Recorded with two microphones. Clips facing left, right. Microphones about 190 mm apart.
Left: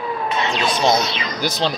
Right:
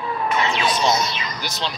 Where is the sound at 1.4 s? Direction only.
40° left (ahead or behind).